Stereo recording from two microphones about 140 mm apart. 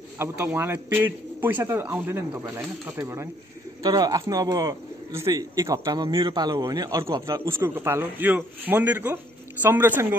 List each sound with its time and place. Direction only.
0.2 s a man's voice: 15° right (ahead or behind)
3.8 s a man's voice: 25° right (ahead or behind)
7.4 s a man's voice: 15° right (ahead or behind)